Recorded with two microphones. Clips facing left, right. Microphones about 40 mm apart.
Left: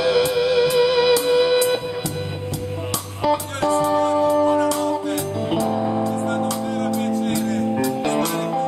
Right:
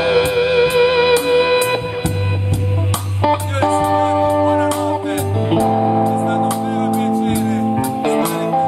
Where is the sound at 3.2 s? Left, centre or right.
Right.